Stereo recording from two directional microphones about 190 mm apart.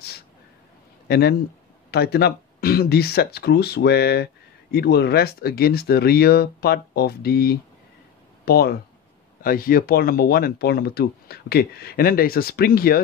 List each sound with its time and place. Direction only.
1.0 s speech: 55° left (ahead or behind)